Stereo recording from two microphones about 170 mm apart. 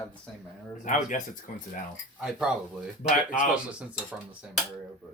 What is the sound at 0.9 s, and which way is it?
Speech, 50° left (ahead or behind).